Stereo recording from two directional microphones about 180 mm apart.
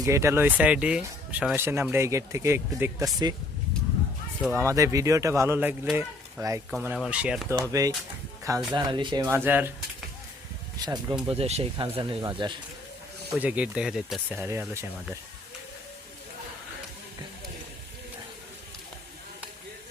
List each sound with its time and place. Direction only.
0.0 s speech: 15° right (ahead or behind)
4.4 s speech: 15° right (ahead or behind)
7.7 s speech: 20° right (ahead or behind)
10.8 s speech: 20° right (ahead or behind)
11.3 s speech: 35° right (ahead or behind)
13.4 s speech: 5° right (ahead or behind)